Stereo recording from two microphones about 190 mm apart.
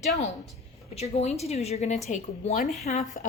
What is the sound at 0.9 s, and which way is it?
A woman's voice, 35° left (ahead or behind).